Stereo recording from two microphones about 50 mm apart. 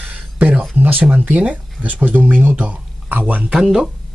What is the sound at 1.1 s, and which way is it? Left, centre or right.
Speech, right.